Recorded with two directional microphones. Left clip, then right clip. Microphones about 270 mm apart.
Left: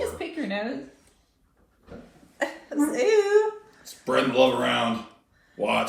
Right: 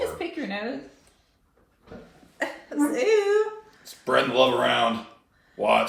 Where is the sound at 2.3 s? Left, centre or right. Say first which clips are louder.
Even; centre.